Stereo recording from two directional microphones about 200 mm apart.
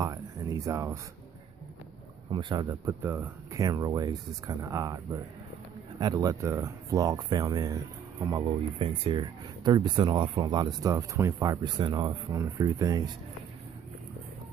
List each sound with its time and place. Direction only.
0.0 s speech: 20° right (ahead or behind)
2.3 s speech: 20° right (ahead or behind)